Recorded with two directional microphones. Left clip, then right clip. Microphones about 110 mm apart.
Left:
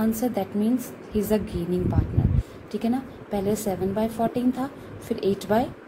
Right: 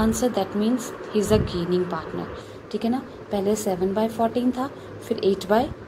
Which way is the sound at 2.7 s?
35° left (ahead or behind).